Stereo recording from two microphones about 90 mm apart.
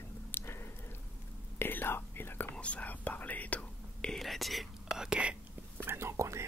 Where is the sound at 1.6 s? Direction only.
25° left (ahead or behind); by 5.3 s 10° right (ahead or behind).